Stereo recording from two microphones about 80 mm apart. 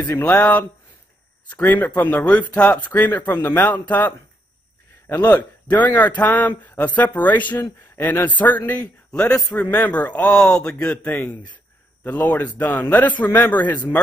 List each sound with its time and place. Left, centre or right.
0.1 s a man's voice: left
0.4 s a man's voice: centre